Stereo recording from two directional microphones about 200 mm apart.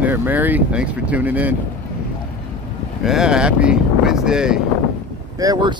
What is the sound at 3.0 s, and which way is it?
Speech, 5° right (ahead or behind).